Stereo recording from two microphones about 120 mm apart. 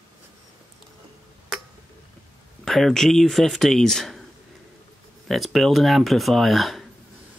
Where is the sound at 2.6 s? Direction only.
5° left (ahead or behind).